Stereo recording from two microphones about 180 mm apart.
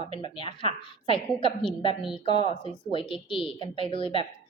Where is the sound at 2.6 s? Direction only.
30° left (ahead or behind).